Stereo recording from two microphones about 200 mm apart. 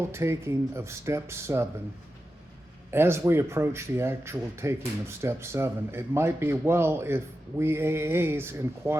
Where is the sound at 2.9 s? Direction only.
10° right (ahead or behind).